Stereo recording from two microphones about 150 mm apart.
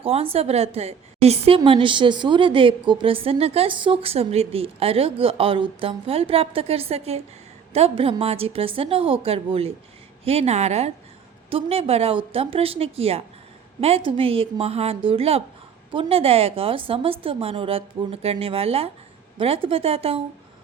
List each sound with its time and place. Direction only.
0.0 s a woman's voice: 40° right (ahead or behind)